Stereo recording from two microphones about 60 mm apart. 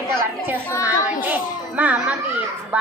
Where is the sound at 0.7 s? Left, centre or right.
Left.